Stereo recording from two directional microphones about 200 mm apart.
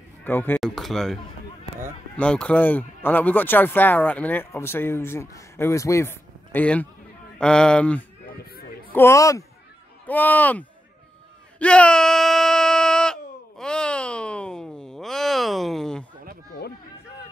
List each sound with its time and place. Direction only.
0.2 s speech: 10° left (ahead or behind)
8.3 s music: 50° left (ahead or behind)
8.9 s speech: 15° left (ahead or behind)
11.6 s a sound: 5° left (ahead or behind)